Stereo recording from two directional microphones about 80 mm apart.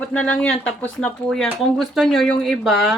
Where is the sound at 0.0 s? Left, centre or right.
Centre.